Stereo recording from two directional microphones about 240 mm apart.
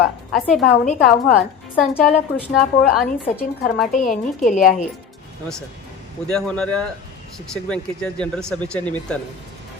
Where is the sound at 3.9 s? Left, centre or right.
Left.